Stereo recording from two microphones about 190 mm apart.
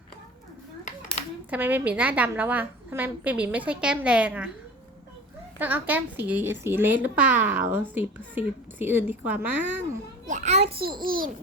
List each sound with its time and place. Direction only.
1.5 s speech: 10° right (ahead or behind)
5.5 s speech: 10° right (ahead or behind)
10.2 s a child's voice: 40° right (ahead or behind)
10.8 s a child's voice: 50° right (ahead or behind)